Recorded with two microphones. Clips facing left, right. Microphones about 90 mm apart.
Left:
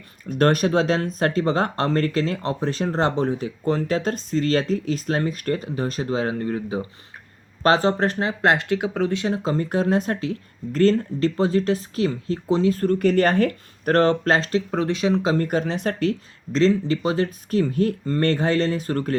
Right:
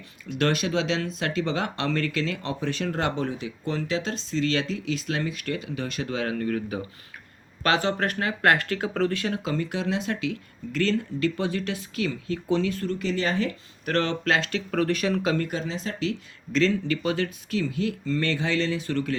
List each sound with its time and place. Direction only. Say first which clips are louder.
0.3 s speech: left 6 dB; 40° left (ahead or behind)
12.8 s speech: left 9 dB; 50° left (ahead or behind); by 14.6 s 35° left (ahead or behind)
14.7 s speech: even; 20° left (ahead or behind)
15.4 s speech: left 7 dB; 55° left (ahead or behind)
16.5 s speech: left 4 dB; 35° left (ahead or behind)